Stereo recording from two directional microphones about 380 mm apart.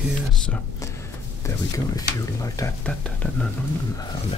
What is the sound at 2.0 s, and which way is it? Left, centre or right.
Speech, centre.